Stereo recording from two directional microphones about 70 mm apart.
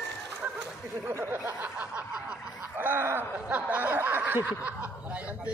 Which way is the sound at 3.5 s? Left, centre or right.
Centre.